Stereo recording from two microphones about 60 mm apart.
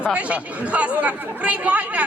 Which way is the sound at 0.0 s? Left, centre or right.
Centre.